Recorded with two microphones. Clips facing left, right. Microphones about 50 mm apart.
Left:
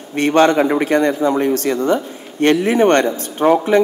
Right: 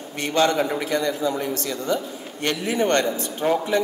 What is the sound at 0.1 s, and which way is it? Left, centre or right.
A man's voice, left.